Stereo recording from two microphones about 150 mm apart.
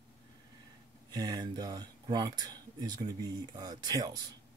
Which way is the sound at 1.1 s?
25° right (ahead or behind).